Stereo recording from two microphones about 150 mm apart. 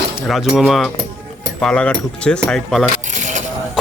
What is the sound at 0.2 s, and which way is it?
Speech, centre (ahead or behind).